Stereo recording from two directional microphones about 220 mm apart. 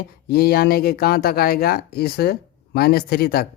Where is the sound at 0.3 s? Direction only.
45° left (ahead or behind).